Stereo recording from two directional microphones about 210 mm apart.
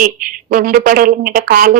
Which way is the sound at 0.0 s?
40° right (ahead or behind).